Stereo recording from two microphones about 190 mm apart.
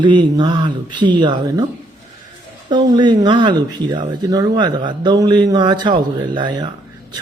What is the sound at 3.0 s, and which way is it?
Speech, 25° right (ahead or behind).